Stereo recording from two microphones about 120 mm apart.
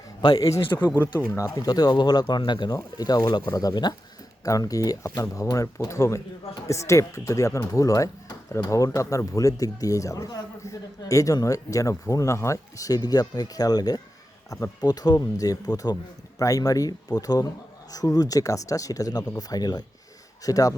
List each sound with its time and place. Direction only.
0.2 s speech: 35° left (ahead or behind)
0.6 s speech: 40° left (ahead or behind)
1.3 s speech: 25° left (ahead or behind)